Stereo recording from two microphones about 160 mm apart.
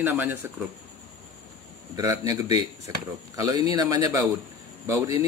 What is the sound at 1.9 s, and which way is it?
Speech, 25° right (ahead or behind).